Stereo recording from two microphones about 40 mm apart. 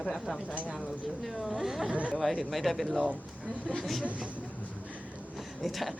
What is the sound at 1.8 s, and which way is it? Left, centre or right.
Speech, right.